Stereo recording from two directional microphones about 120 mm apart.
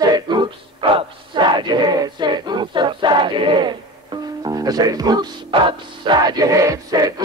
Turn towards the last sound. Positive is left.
turn(degrees=-30)  # may be behind; listen again after turning